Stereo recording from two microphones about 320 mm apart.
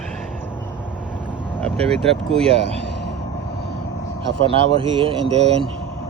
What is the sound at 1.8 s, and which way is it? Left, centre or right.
Speech, centre.